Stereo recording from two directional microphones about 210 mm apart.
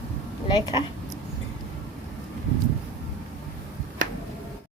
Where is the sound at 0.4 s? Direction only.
20° left (ahead or behind).